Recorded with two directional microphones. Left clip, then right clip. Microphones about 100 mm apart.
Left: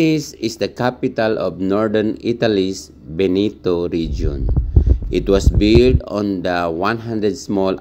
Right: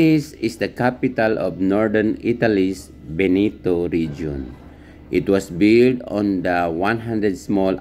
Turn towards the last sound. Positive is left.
turn(degrees=25)  # may be behind; listen again after turning